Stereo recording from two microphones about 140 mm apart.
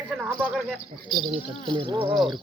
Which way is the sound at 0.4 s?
5° right (ahead or behind).